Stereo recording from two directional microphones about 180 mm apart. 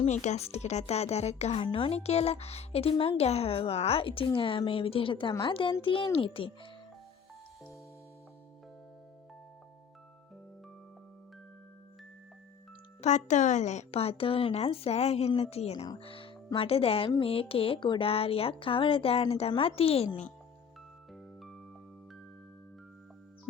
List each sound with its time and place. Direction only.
0.0 s speech: 40° left (ahead or behind)
13.0 s speech: 40° left (ahead or behind)
21.1 s music: centre (ahead or behind)